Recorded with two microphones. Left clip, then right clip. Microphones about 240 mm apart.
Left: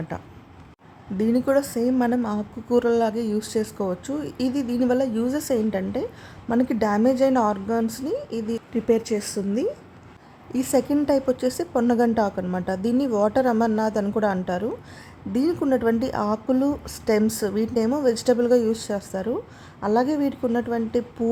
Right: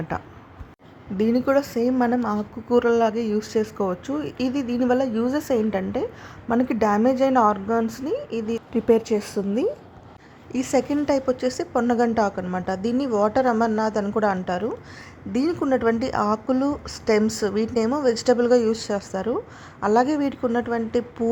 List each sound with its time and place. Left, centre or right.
0.1 s a woman's voice: centre